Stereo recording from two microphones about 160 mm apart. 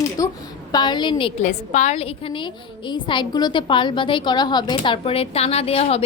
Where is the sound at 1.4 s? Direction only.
45° left (ahead or behind).